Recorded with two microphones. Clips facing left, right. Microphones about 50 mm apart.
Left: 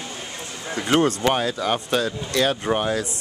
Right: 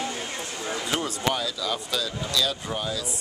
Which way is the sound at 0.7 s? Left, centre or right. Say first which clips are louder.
Left 10 dB; left.